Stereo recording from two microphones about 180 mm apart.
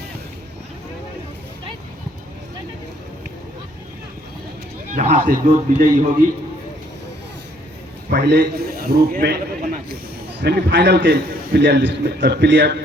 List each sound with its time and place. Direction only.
4.9 s a man's voice: 45° right (ahead or behind)
8.1 s a man's voice: 65° right (ahead or behind)
10.4 s a man's voice: 65° right (ahead or behind)